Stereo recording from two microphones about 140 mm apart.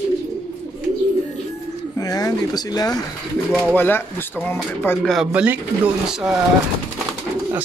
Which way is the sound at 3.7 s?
15° left (ahead or behind).